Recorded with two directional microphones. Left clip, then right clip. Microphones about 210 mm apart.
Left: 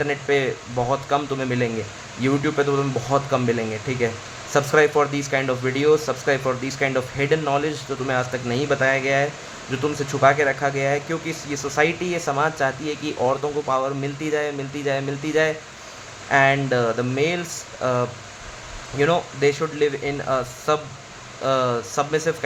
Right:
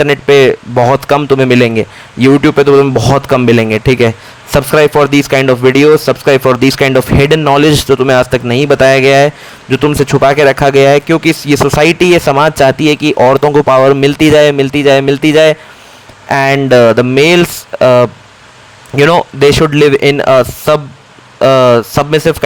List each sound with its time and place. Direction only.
0.0 s speech: 45° right (ahead or behind)